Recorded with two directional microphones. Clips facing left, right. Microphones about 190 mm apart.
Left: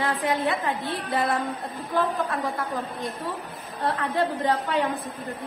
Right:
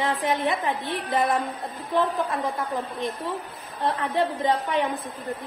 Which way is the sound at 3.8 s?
20° right (ahead or behind).